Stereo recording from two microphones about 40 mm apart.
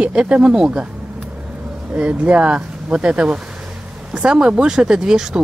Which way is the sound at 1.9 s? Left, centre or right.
Right.